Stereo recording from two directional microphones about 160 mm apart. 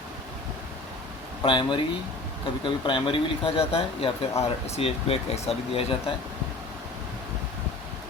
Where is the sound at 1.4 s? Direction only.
30° left (ahead or behind).